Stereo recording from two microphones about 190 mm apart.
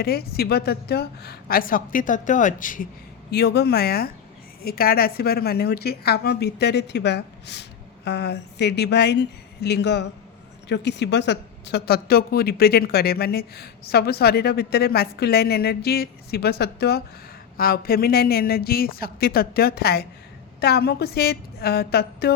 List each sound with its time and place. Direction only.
0.0 s a woman's voice: 55° left (ahead or behind)
3.3 s a woman's voice: 60° left (ahead or behind)